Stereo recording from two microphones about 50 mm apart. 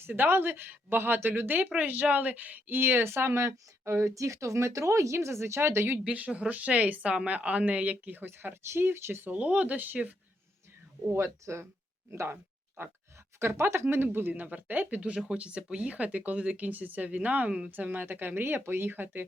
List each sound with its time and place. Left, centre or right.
0.0 s speech: right
6.1 s speech: right
8.3 s speech: right
9.3 s speech: right
11.1 s speech: right
12.1 s speech: right
13.4 s speech: right
13.8 s speech: right
14.3 s speech: right
17.7 s speech: right